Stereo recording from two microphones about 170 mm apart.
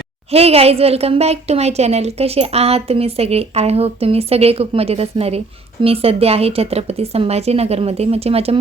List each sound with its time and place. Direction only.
0.3 s a woman's voice: 35° right (ahead or behind)